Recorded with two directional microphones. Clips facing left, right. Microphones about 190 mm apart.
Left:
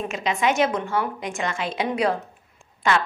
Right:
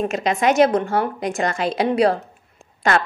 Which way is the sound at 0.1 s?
40° right (ahead or behind).